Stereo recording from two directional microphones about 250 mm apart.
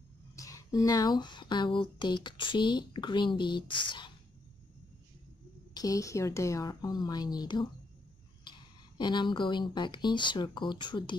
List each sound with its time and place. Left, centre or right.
0.4 s speech: centre
5.8 s speech: centre